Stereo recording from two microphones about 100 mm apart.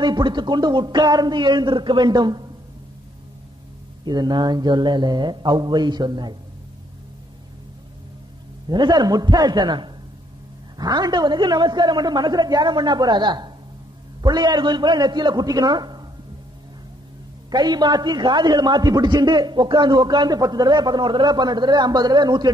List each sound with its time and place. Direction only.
0.0 s a man's voice: 50° right (ahead or behind)
4.0 s a man's voice: 45° right (ahead or behind)
8.6 s a man's voice: 45° right (ahead or behind)
17.5 s a man's voice: 45° right (ahead or behind)